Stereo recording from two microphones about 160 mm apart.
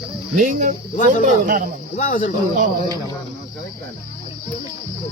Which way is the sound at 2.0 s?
55° left (ahead or behind).